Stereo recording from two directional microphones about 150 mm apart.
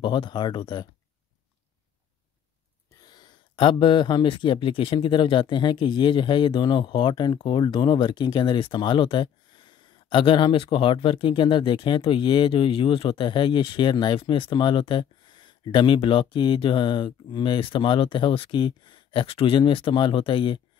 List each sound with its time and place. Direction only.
0.0 s speech: 30° left (ahead or behind)
3.1 s speech: 30° left (ahead or behind)